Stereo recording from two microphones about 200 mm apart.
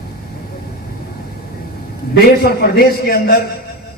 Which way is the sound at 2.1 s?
50° left (ahead or behind).